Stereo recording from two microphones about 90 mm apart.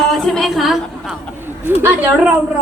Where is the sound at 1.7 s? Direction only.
25° right (ahead or behind).